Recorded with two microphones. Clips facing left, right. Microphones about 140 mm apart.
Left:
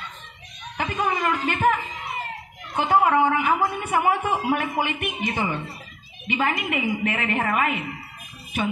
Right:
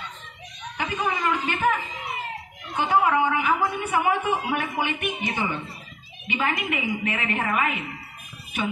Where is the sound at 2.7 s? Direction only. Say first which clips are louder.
Left 2 dB; 40° left (ahead or behind).